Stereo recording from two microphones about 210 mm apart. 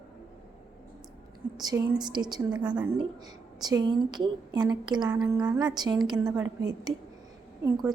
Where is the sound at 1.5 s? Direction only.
15° right (ahead or behind).